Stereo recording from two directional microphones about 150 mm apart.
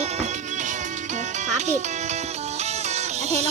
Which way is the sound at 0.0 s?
50° right (ahead or behind).